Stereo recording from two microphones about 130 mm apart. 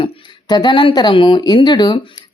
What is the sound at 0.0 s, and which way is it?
Speech, 35° left (ahead or behind).